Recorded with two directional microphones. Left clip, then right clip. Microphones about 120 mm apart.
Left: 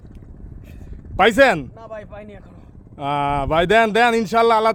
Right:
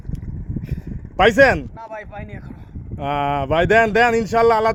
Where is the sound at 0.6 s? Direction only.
10° left (ahead or behind).